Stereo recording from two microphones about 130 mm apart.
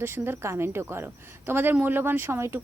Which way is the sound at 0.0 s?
20° right (ahead or behind).